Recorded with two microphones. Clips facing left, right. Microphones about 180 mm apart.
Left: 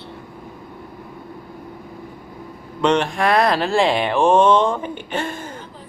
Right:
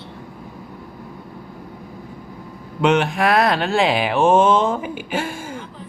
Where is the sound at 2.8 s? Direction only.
5° right (ahead or behind).